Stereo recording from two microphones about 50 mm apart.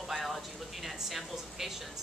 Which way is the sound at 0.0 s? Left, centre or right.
Centre.